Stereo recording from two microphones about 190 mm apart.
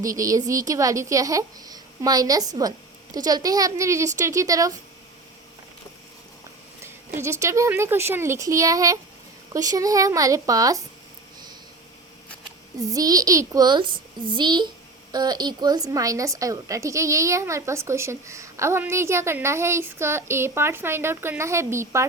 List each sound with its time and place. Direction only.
0.0 s a woman's voice: 15° right (ahead or behind)
7.2 s a woman's voice: 15° right (ahead or behind)
12.8 s a child's voice: 20° right (ahead or behind)